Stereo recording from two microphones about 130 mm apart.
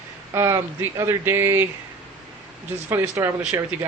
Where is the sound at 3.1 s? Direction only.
25° right (ahead or behind).